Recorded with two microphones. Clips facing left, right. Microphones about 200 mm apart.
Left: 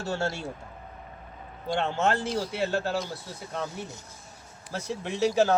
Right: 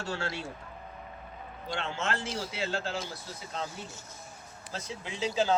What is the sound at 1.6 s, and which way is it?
Speech, 55° left (ahead or behind).